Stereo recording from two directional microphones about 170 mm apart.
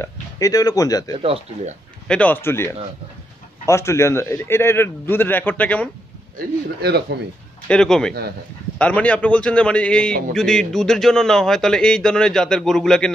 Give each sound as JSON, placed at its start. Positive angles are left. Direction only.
{"t": 0.0, "sound": "speech", "side_deg": 20}
{"t": 1.2, "sound": "speech", "side_deg": -35}
{"t": 2.0, "sound": "a man's voice", "side_deg": 10}
{"t": 6.3, "sound": "speech", "side_deg": -70}
{"t": 7.6, "sound": "a man's voice", "side_deg": 5}